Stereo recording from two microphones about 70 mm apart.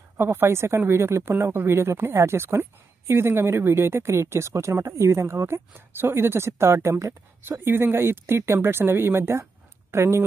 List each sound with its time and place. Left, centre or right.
0.2 s speech: right
7.4 s a woman's voice: right